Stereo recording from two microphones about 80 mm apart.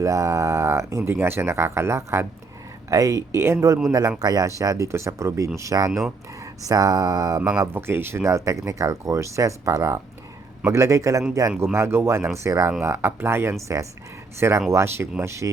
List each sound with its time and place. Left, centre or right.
0.0 s speech: right
7.5 s speech: right